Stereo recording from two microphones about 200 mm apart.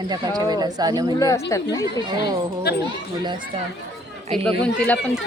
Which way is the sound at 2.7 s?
55° left (ahead or behind).